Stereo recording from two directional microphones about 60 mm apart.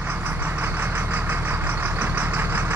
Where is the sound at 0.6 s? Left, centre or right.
Right.